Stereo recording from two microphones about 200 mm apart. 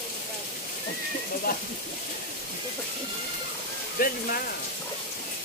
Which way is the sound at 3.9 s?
50° left (ahead or behind).